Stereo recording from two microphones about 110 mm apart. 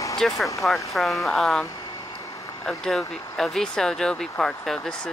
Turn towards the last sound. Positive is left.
turn(degrees=5)  # may be behind; listen again after turning